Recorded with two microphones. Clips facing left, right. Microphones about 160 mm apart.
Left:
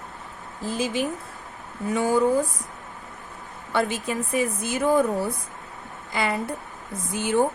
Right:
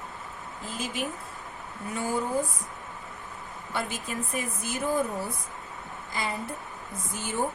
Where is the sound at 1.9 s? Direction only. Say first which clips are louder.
Left 8 dB; 80° left.